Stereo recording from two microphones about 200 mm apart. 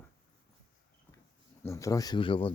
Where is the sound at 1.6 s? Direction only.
15° left (ahead or behind).